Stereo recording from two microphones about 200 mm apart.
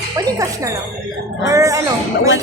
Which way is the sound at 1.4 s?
15° right (ahead or behind).